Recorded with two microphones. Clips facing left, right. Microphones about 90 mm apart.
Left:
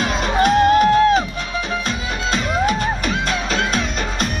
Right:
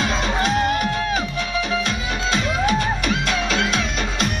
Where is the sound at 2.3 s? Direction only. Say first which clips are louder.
Left 2 dB; 40° left (ahead or behind).